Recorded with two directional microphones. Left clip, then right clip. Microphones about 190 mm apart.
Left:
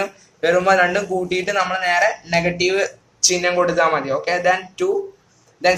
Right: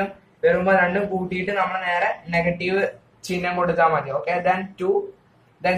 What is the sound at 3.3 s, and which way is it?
Speech, 60° left (ahead or behind).